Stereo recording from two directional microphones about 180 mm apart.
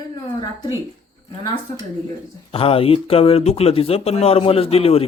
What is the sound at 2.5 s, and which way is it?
A man's voice, 30° left (ahead or behind).